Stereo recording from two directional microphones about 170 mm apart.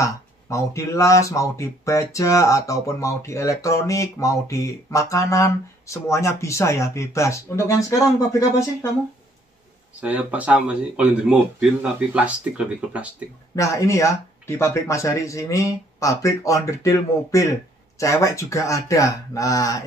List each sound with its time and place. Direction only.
0.0 s speech: 20° left (ahead or behind)
9.9 s speech: 10° right (ahead or behind)
13.6 s speech: 15° left (ahead or behind)